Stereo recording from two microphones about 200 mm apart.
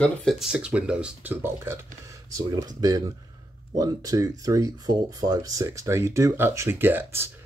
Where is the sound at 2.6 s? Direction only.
20° right (ahead or behind).